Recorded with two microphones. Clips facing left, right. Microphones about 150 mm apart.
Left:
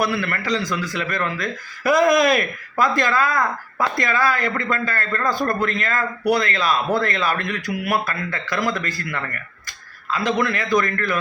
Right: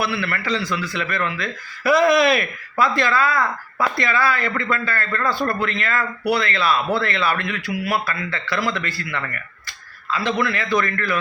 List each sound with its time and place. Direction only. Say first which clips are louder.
0.0 s a man's voice: left 2 dB; 45° left (ahead or behind)